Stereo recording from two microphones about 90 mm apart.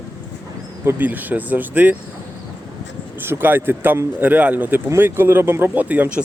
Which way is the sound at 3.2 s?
25° right (ahead or behind).